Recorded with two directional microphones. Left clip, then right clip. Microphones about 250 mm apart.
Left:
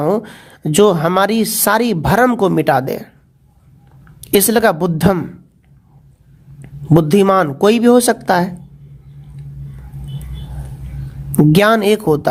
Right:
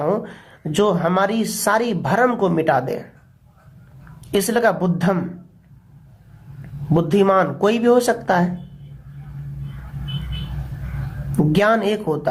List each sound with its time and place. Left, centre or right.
0.0 s a woman's voice: left
4.2 s a woman's voice: left
6.6 s a woman's voice: left
11.5 s a woman's voice: left